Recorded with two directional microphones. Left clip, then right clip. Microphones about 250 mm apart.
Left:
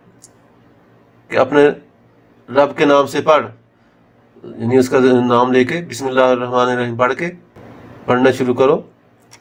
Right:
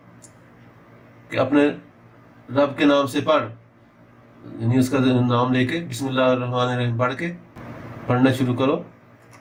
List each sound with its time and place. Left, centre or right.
1.3 s a man's voice: left
4.6 s a man's voice: left